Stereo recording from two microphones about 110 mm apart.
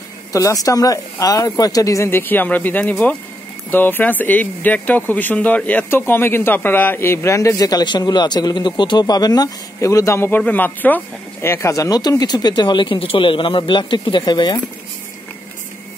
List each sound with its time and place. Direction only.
0.3 s speech: 30° left (ahead or behind)
11.4 s speech: 25° left (ahead or behind); by 14.6 s 40° left (ahead or behind)